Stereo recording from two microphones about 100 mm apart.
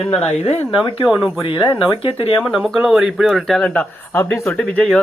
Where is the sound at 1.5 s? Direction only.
50° left (ahead or behind).